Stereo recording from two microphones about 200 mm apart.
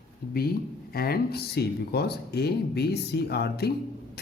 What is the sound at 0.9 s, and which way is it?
Speech, 50° left (ahead or behind).